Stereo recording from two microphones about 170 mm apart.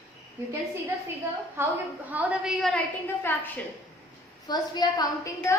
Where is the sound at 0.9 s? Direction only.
10° right (ahead or behind).